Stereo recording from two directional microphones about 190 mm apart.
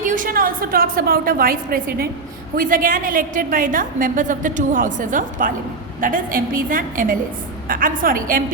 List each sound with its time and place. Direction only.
0.0 s a woman's voice: 45° right (ahead or behind)